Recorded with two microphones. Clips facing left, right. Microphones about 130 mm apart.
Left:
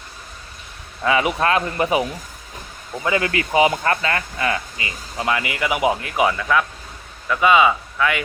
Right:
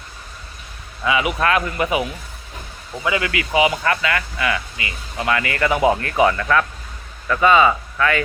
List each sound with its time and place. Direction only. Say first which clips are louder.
1.0 s speech: left 1 dB; 40° left (ahead or behind)
5.3 s speech: right 3 dB; 15° left (ahead or behind)